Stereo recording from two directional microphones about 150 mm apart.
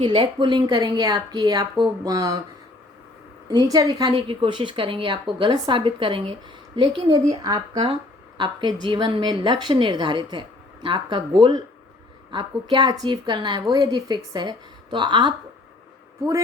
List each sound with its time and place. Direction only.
0.0 s a woman's voice: 30° right (ahead or behind)
3.5 s a woman's voice: 25° right (ahead or behind)